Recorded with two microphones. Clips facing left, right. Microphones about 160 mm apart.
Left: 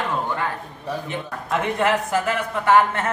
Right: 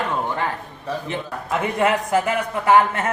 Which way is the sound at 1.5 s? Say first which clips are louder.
Right 1 dB; 5° right (ahead or behind).